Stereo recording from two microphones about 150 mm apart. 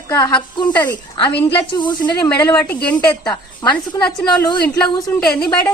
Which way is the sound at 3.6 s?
25° left (ahead or behind).